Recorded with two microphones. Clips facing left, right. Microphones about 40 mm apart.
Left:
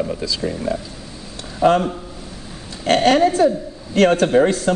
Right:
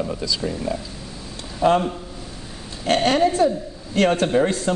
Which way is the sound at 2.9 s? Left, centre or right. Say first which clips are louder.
Left 4 dB; left.